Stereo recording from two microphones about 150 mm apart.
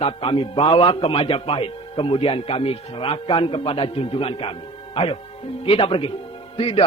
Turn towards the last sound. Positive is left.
turn(degrees=40)  # may be behind; listen again after turning